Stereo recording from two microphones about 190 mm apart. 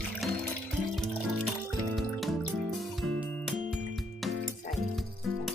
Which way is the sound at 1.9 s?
Centre (ahead or behind).